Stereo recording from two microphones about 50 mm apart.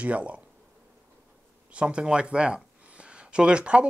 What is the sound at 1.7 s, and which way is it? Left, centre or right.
Speech, right.